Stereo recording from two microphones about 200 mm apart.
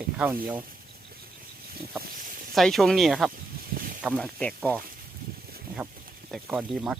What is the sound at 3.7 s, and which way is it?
Snake, 45° right (ahead or behind).